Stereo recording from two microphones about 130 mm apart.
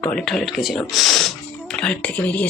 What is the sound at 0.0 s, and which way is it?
Speech, 5° left (ahead or behind).